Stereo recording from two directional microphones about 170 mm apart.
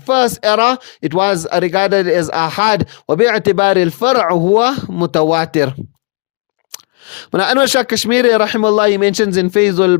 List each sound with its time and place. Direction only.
0.0 s speech: 45° left (ahead or behind)